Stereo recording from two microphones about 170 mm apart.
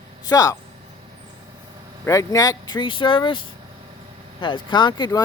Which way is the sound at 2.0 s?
20° left (ahead or behind).